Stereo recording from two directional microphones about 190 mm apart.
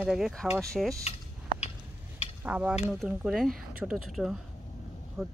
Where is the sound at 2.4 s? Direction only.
10° right (ahead or behind).